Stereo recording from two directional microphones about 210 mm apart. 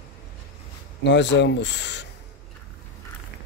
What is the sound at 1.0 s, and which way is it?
Speech, 55° left (ahead or behind).